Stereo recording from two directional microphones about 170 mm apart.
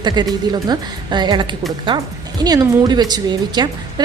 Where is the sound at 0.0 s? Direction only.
25° right (ahead or behind).